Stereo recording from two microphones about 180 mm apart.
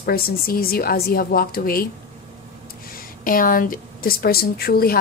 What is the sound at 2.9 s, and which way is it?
A woman's voice, 50° left (ahead or behind).